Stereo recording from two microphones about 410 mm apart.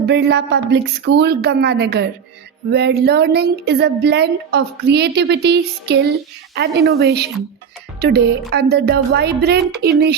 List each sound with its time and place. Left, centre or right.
0.0 s speech: right